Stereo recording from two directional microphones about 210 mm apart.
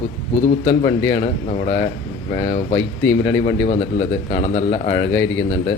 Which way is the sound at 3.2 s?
30° left (ahead or behind).